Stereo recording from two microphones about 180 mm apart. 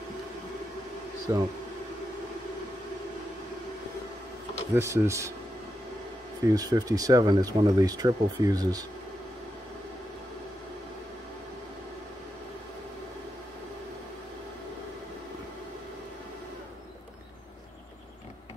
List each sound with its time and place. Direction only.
1.3 s speech: 20° right (ahead or behind)
4.7 s speech: 15° right (ahead or behind)
6.4 s speech: 20° right (ahead or behind)